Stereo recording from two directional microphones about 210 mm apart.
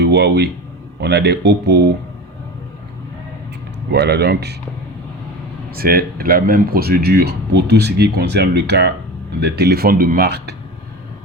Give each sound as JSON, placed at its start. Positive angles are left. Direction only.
{"t": 0.0, "sound": "speech", "side_deg": -50}
{"t": 3.9, "sound": "speech", "side_deg": -50}
{"t": 5.7, "sound": "speech", "side_deg": -45}